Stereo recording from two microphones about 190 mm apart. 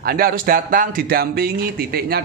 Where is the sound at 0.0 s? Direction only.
50° right (ahead or behind).